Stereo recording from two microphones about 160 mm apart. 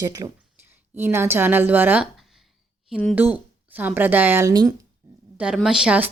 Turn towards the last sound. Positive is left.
turn(degrees=-10)  # may be behind; listen again after turning